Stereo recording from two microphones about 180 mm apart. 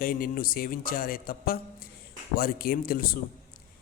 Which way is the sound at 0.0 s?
55° left (ahead or behind).